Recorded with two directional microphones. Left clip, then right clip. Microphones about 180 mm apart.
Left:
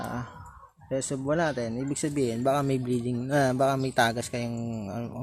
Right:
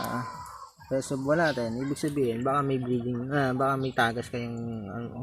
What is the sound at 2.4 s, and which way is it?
Speech, 35° left (ahead or behind).